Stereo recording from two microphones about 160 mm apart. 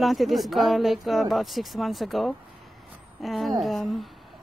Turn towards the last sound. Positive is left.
turn(degrees=0)  # may be behind; listen again after turning